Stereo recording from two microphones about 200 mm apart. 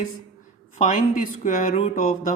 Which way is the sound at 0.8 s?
40° left (ahead or behind).